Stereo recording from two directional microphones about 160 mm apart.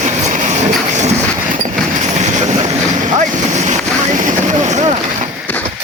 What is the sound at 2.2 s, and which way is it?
Train, 45° right (ahead or behind).